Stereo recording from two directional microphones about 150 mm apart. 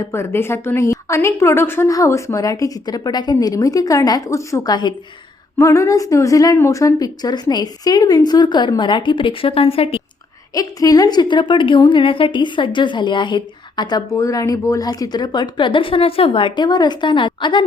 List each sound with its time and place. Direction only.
0.0 s a woman's voice: 20° left (ahead or behind); by 10.0 s 40° left (ahead or behind)
10.5 s a woman's voice: 25° left (ahead or behind)